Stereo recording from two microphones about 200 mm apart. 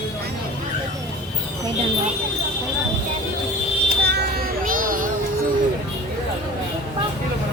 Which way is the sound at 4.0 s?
55° right (ahead or behind).